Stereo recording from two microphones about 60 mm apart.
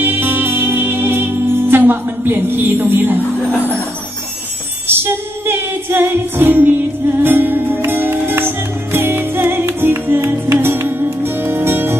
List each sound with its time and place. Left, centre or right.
0.0 s music: right
4.8 s music: right